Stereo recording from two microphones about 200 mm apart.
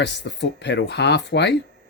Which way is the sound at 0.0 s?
60° left (ahead or behind).